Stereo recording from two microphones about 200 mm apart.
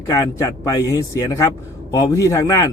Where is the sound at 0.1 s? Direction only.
15° left (ahead or behind).